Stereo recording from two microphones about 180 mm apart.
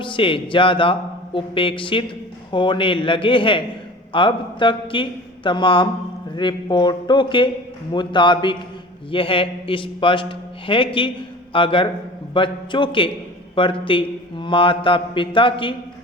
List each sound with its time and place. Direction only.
0.0 s a man's voice: 30° left (ahead or behind)